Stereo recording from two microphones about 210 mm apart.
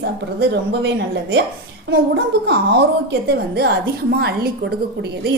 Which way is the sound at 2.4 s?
55° right (ahead or behind).